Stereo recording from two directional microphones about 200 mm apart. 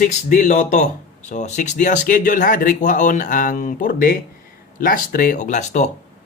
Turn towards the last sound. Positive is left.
turn(degrees=35)  # may be behind; listen again after turning